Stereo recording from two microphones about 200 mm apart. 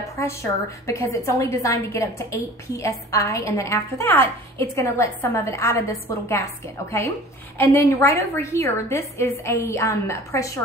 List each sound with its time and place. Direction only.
0.2 s a woman's voice: 15° left (ahead or behind)
7.5 s a woman's voice: 15° left (ahead or behind)